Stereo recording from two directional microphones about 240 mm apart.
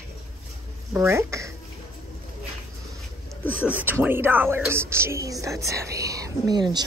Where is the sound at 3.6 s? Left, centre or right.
Centre.